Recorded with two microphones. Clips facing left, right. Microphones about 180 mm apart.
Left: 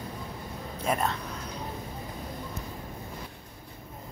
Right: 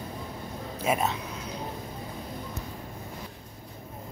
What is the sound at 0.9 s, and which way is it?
Speech, 5° right (ahead or behind).